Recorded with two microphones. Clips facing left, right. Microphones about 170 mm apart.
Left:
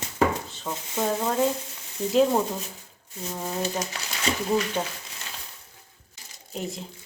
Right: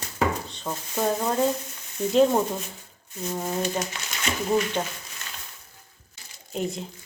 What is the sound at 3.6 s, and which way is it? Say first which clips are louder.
Speech: right 1 dB; 35° left (ahead or behind).